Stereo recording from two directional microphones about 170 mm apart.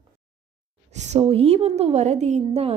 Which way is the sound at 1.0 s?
40° right (ahead or behind).